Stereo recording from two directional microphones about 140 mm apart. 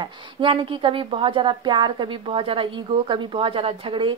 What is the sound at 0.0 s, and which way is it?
A woman's voice, 35° right (ahead or behind).